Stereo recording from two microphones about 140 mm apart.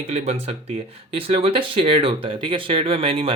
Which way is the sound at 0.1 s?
50° right (ahead or behind).